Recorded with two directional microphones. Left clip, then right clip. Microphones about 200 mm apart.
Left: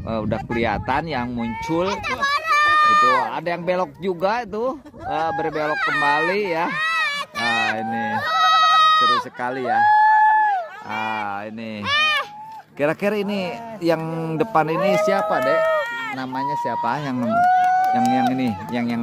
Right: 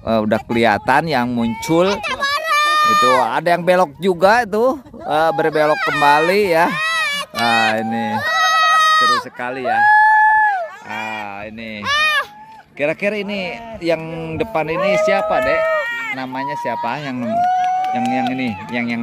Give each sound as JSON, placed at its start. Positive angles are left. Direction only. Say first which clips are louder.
{"t": 0.1, "sound": "speech", "louder": "right 7 dB", "side_deg": -30}
{"t": 2.0, "sound": "speech", "louder": "right 2 dB", "side_deg": -40}
{"t": 7.7, "sound": "speech", "louder": "right 4 dB", "side_deg": -25}
{"t": 8.2, "sound": "goat", "louder": "right 1 dB", "side_deg": -40}
{"t": 9.4, "sound": "speech", "louder": "right 3 dB", "side_deg": 5}
{"t": 11.8, "sound": "a sound", "louder": "right 3 dB", "side_deg": -30}
{"t": 12.8, "sound": "a man's voice", "louder": "right 2 dB", "side_deg": 15}
{"t": 17.3, "sound": "run", "louder": "even", "side_deg": -5}
{"t": 17.9, "sound": "a man's voice", "louder": "even", "side_deg": 10}